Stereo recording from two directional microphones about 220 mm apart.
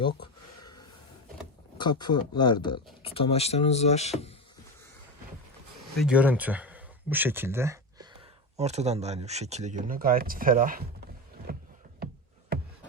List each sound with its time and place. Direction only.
1.8 s speech: 20° left (ahead or behind)
6.0 s speech: 5° right (ahead or behind)
8.5 s speech: 30° right (ahead or behind)
11.5 s a sound: 40° right (ahead or behind)